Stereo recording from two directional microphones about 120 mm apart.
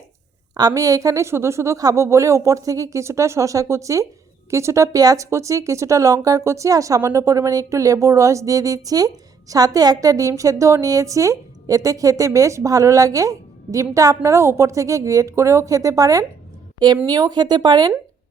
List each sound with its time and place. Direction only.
0.5 s speech: 30° right (ahead or behind)